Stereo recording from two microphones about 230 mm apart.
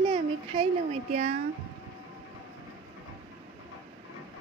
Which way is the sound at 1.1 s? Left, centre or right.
Right.